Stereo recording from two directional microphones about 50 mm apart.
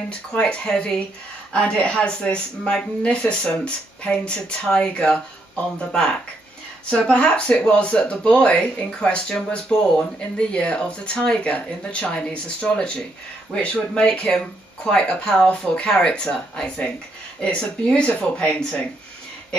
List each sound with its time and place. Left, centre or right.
0.3 s speech: left